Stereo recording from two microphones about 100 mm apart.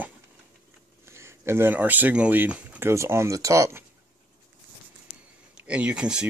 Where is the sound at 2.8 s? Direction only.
25° right (ahead or behind).